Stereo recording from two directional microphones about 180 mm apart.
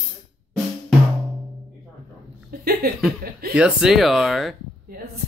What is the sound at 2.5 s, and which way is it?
Speech, 55° right (ahead or behind).